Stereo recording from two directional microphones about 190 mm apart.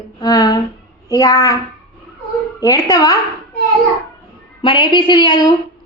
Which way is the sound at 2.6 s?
20° left (ahead or behind).